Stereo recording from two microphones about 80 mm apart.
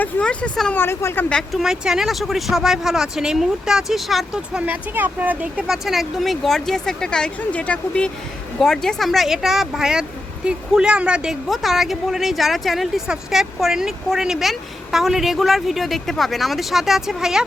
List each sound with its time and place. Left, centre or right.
0.0 s speech: centre
0.7 s speech: left
1.5 s a woman's voice: centre
4.6 s speech: right
5.6 s a woman's voice: centre